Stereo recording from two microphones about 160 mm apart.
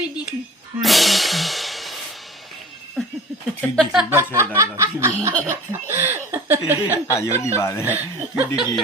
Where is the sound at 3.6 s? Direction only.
5° left (ahead or behind).